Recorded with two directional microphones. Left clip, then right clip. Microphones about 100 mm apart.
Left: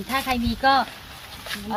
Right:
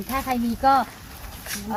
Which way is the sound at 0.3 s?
20° right (ahead or behind).